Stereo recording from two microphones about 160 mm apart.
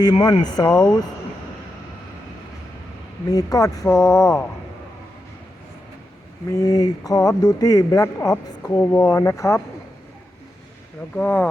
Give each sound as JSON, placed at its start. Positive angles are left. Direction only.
{"t": 0.0, "sound": "speech", "side_deg": 25}
{"t": 3.3, "sound": "speech", "side_deg": 20}
{"t": 6.5, "sound": "speech", "side_deg": 20}
{"t": 11.1, "sound": "speech", "side_deg": 10}